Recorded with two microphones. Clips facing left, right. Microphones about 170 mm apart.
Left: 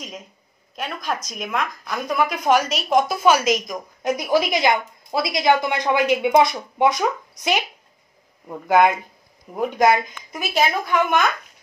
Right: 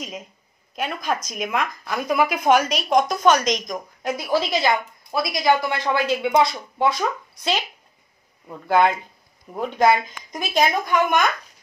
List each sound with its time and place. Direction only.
0.7 s speech: centre (ahead or behind)
4.0 s a woman's voice: 20° left (ahead or behind)